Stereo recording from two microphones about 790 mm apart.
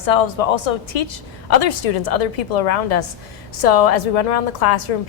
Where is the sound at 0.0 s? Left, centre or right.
Left.